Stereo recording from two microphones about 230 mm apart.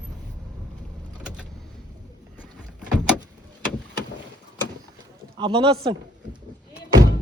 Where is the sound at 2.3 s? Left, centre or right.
Centre.